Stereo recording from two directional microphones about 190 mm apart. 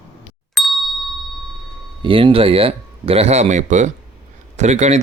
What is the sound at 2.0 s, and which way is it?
Speech, 25° right (ahead or behind).